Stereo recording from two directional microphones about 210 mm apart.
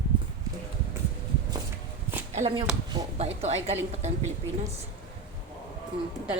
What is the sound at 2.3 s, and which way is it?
Speech, 30° right (ahead or behind).